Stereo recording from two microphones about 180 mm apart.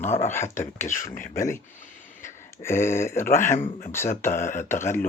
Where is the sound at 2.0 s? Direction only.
45° left (ahead or behind).